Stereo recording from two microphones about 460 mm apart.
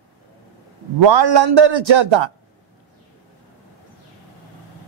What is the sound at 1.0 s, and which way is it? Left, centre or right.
A man's voice, right.